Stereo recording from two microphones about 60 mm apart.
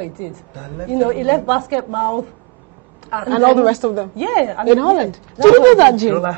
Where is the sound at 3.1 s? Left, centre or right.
Centre.